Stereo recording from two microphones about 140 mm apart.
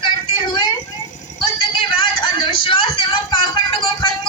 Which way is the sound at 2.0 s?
35° left (ahead or behind).